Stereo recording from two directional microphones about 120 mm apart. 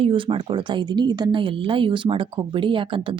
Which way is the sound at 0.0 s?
45° right (ahead or behind).